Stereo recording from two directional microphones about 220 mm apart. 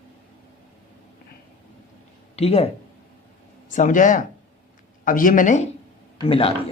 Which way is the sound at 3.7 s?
35° left (ahead or behind).